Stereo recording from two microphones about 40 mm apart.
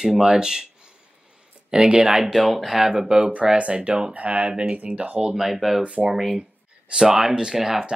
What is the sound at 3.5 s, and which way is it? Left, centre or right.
Speech, right.